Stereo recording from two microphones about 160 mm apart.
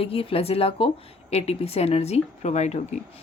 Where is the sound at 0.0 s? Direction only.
35° left (ahead or behind).